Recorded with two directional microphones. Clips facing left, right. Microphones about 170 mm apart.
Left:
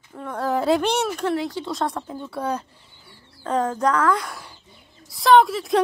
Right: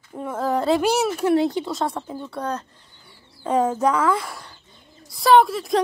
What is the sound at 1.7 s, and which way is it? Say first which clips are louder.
Speech: even; centre (ahead or behind).